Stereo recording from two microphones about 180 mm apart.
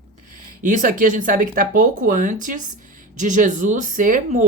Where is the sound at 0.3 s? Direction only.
50° right (ahead or behind).